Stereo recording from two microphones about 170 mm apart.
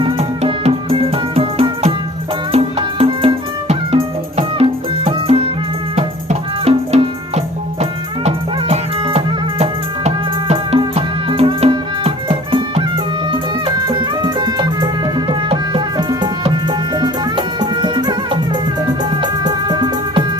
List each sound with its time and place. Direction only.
0.0 s music: 35° right (ahead or behind)
6.7 s music: 40° right (ahead or behind)